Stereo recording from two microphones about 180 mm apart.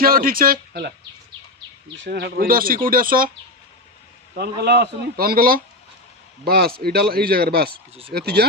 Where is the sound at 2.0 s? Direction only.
60° right (ahead or behind).